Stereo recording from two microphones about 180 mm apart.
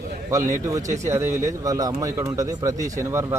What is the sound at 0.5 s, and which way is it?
A man's voice, 15° right (ahead or behind).